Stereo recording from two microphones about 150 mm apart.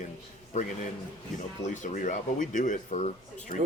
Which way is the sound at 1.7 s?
60° left (ahead or behind).